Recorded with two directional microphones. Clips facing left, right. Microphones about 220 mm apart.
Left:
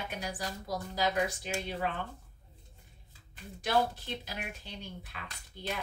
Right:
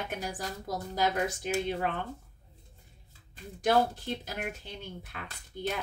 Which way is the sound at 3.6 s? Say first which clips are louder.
Right 4 dB; 50° right (ahead or behind).